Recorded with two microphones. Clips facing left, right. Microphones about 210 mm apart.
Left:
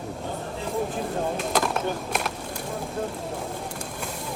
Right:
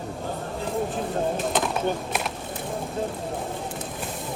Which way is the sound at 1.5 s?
Centre (ahead or behind).